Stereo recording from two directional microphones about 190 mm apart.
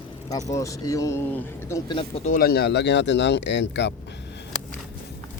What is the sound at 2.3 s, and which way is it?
Speech, 50° left (ahead or behind).